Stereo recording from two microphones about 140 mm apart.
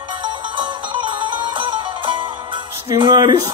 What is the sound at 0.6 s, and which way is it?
Music, 35° right (ahead or behind).